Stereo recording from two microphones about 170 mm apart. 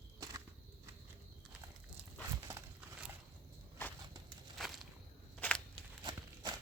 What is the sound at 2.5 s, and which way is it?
Crumpling, 10° right (ahead or behind).